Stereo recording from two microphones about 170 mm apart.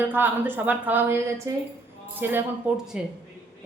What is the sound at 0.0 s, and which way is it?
A woman's voice, 10° right (ahead or behind).